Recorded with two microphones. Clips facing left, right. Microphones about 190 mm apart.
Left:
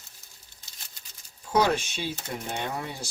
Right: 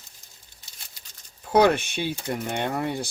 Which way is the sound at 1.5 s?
60° right (ahead or behind).